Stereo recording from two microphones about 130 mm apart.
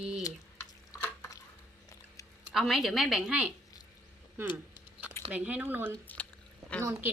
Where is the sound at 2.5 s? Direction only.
5° right (ahead or behind).